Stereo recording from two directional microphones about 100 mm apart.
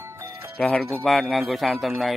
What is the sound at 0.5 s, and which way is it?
Speech, 10° left (ahead or behind).